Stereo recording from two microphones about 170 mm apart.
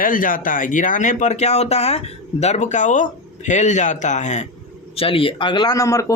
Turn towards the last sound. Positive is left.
turn(degrees=20)  # may be behind; listen again after turning